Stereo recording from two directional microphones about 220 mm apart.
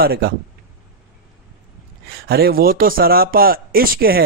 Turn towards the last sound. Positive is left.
turn(degrees=-40)  # may be behind; listen again after turning